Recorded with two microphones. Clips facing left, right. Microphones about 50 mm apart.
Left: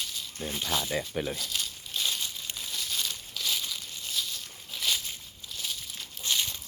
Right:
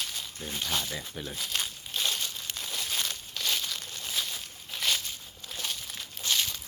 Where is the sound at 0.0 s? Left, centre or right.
Centre.